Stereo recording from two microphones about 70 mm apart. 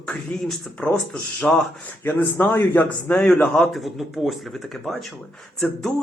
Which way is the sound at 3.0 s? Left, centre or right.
Left.